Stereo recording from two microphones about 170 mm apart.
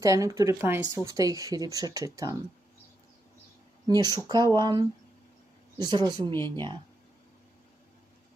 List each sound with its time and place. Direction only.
0.0 s speech: 20° right (ahead or behind)
3.8 s speech: 20° right (ahead or behind)